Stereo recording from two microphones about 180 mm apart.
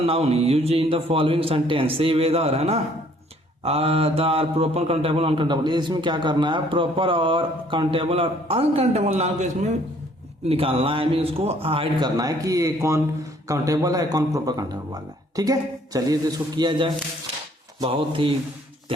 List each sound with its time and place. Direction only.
0.0 s a man's voice: 35° right (ahead or behind)